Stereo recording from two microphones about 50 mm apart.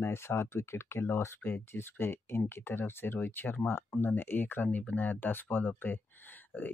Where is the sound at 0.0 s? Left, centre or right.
Left.